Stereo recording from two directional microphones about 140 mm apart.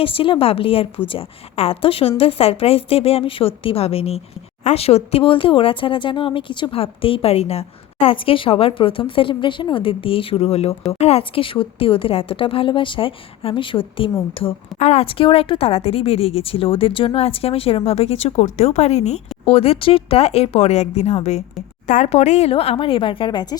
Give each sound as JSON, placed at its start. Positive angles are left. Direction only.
{"t": 0.0, "sound": "speech", "side_deg": 40}